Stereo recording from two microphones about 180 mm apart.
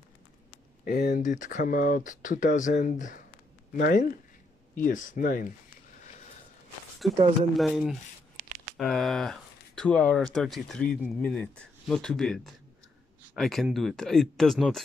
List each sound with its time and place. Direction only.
0.8 s speech: 50° left (ahead or behind)
7.0 s speech: centre (ahead or behind)